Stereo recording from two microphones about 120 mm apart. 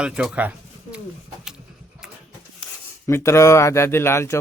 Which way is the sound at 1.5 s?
5° right (ahead or behind).